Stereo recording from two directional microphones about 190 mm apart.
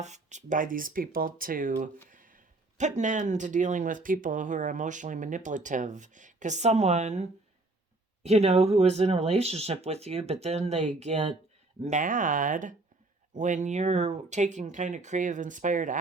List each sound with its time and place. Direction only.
0.0 s speech: 40° right (ahead or behind)